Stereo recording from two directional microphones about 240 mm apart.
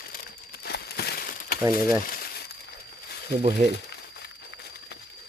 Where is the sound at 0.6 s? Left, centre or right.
Left.